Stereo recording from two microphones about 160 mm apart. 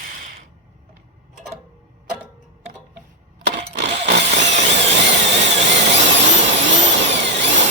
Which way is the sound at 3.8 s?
90° right.